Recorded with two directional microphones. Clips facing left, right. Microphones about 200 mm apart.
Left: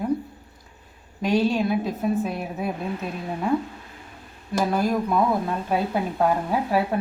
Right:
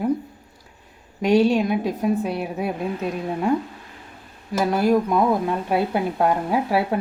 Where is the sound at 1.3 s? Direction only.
15° right (ahead or behind).